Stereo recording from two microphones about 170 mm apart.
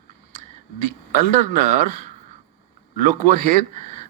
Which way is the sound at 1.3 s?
50° right (ahead or behind).